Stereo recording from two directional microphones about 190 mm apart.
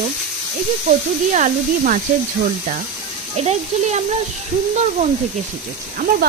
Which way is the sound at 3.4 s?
35° right (ahead or behind).